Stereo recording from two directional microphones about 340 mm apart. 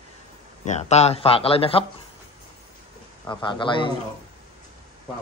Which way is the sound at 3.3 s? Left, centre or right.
Centre.